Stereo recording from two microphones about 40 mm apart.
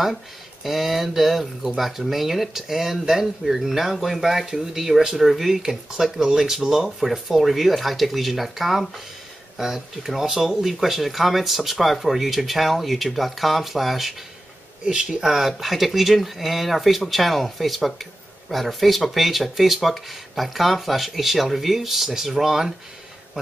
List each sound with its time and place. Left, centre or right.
0.7 s speech: centre
14.9 s speech: centre
15.2 s speech: centre